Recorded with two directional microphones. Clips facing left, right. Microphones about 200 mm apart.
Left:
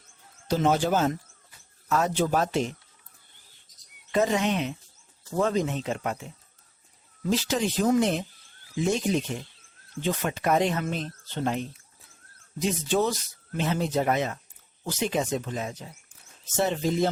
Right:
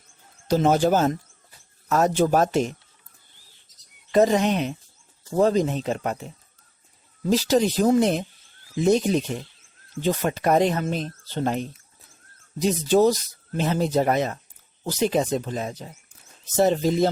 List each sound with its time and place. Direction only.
0.4 s speech: 40° right (ahead or behind)
4.1 s speech: 40° right (ahead or behind)
7.3 s speech: 40° right (ahead or behind)